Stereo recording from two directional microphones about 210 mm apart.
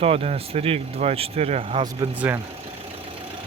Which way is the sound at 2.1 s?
10° right (ahead or behind).